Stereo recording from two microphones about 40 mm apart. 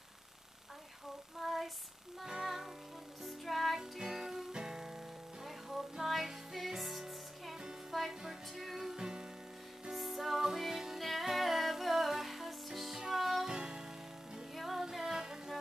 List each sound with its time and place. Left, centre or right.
1.4 s a sound: centre
2.2 s music: centre
4.0 s music: centre
5.4 s music: centre
8.9 s music: centre
9.8 s music: centre
13.5 s music: centre
14.5 s music: centre